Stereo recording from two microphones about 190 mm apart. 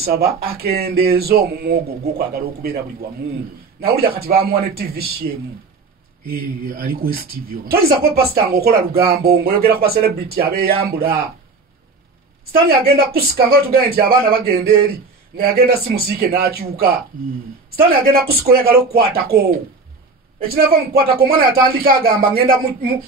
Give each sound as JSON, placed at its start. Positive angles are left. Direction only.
{"t": 0.0, "sound": "speech", "side_deg": -55}
{"t": 3.8, "sound": "speech", "side_deg": -50}
{"t": 12.6, "sound": "speech", "side_deg": -55}
{"t": 20.4, "sound": "speech", "side_deg": -50}